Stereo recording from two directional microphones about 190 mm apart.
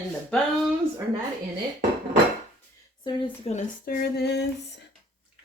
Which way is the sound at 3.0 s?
25° left (ahead or behind).